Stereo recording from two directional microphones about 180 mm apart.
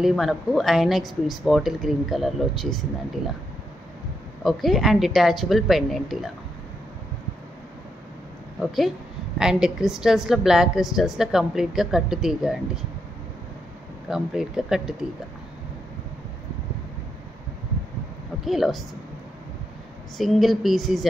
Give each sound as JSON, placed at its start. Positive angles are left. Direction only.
{"t": 0.0, "sound": "a woman's voice", "side_deg": 0}
{"t": 4.4, "sound": "a woman's voice", "side_deg": 0}
{"t": 8.5, "sound": "a woman's voice", "side_deg": 0}
{"t": 14.0, "sound": "a woman's voice", "side_deg": -5}
{"t": 18.4, "sound": "a woman's voice", "side_deg": 0}
{"t": 20.2, "sound": "a woman's voice", "side_deg": 0}